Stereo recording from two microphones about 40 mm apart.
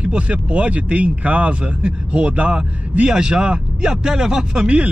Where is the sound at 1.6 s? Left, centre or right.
Right.